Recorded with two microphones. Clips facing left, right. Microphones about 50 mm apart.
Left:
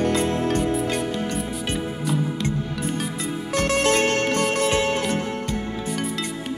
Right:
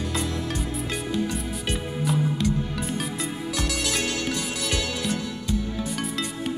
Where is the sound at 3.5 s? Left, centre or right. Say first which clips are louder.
Left 9 dB; left.